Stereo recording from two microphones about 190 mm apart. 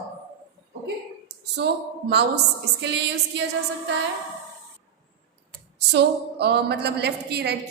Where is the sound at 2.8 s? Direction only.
65° right (ahead or behind).